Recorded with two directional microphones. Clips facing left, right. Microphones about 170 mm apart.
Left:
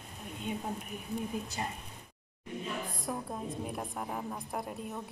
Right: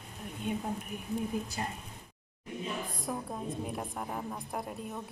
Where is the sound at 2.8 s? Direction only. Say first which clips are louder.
Even; centre (ahead or behind).